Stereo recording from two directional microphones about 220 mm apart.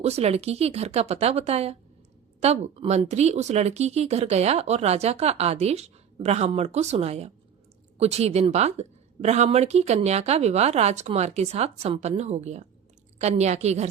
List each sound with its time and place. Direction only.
0.0 s a woman's voice: 30° right (ahead or behind)